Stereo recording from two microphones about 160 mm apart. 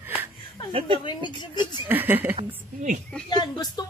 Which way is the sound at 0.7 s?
35° right (ahead or behind).